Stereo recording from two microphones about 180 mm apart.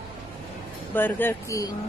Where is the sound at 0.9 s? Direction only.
10° left (ahead or behind).